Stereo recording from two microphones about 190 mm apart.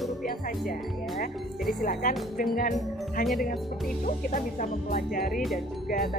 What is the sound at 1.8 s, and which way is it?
Speech, 45° left (ahead or behind).